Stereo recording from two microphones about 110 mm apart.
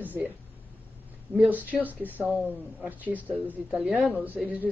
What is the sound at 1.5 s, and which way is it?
Speech, 15° right (ahead or behind).